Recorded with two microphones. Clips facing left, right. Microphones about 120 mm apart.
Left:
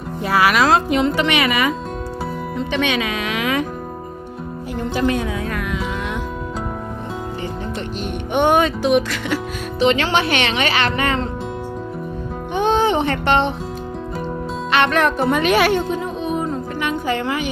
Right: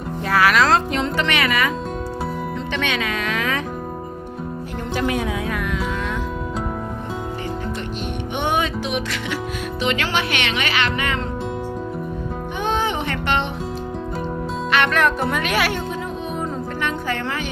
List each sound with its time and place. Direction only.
0.3 s music: 10° left (ahead or behind)
2.8 s speech: 15° left (ahead or behind)
4.9 s speech: 5° right (ahead or behind)
8.4 s music: 50° left (ahead or behind)
9.8 s speech: 30° left (ahead or behind)
12.5 s music: 30° left (ahead or behind)
14.7 s music: 25° left (ahead or behind)
15.3 s speech: 25° left (ahead or behind)
16.3 s music: 15° left (ahead or behind)